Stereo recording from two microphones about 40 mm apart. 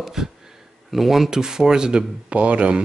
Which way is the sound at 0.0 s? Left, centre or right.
Centre.